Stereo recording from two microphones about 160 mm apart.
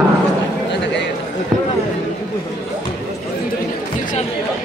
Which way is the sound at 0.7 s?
90° left.